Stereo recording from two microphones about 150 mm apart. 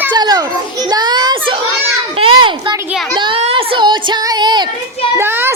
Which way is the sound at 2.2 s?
35° right (ahead or behind).